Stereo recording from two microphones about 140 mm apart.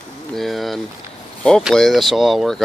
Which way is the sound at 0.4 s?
Centre (ahead or behind).